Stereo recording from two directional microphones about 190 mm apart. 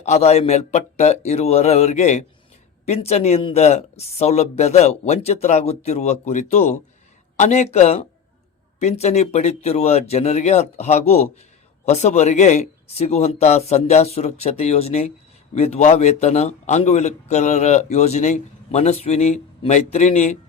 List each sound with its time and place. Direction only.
0.0 s a man's voice: 35° left (ahead or behind)